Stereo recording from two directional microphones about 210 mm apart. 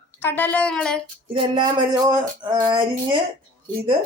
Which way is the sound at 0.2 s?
10° left (ahead or behind).